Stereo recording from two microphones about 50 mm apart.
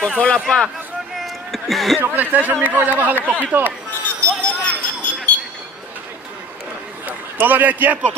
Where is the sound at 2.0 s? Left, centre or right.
Right.